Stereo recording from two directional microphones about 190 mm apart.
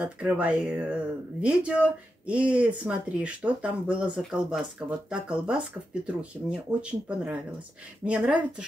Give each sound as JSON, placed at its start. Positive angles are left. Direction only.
{"t": 0.0, "sound": "speech", "side_deg": -5}